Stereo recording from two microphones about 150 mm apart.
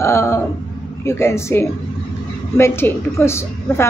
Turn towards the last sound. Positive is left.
turn(degrees=15)  # may be behind; listen again after turning